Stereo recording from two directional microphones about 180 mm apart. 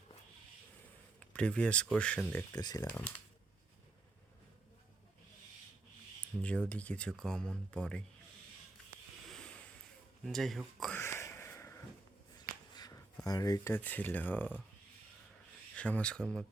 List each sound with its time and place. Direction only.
1.3 s speech: 5° left (ahead or behind)
2.6 s speech: 20° left (ahead or behind)
6.4 s speech: 5° left (ahead or behind)
9.3 s a sound: 5° left (ahead or behind)
10.2 s speech: centre (ahead or behind)
11.0 s a sound: 15° left (ahead or behind)
13.2 s speech: 20° left (ahead or behind)
15.7 s speech: 5° left (ahead or behind)